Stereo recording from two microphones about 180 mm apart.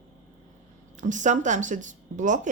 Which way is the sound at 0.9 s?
45° right (ahead or behind).